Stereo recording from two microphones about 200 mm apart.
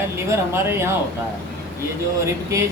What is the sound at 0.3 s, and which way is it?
Speech, 10° right (ahead or behind).